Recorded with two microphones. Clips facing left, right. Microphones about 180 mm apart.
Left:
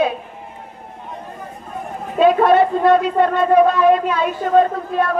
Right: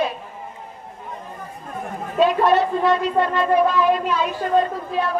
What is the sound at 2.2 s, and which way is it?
Speech, 55° left (ahead or behind).